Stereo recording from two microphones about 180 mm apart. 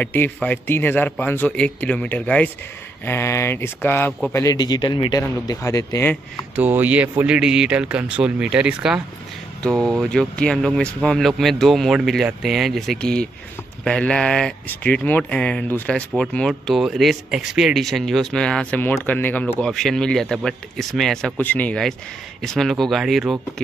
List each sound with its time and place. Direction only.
0.0 s a man's voice: 10° left (ahead or behind)
6.5 s speech: 10° right (ahead or behind)